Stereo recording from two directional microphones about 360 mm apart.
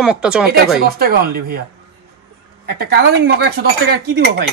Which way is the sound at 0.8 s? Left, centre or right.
Right.